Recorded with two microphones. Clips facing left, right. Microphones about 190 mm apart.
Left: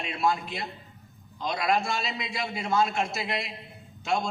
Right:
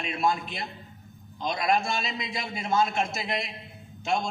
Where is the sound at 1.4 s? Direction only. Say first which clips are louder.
Right 1 dB; 20° right (ahead or behind).